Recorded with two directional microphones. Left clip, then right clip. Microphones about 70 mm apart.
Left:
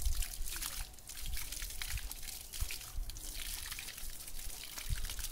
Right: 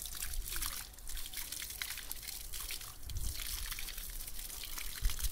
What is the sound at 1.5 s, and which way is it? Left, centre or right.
Liquid, right.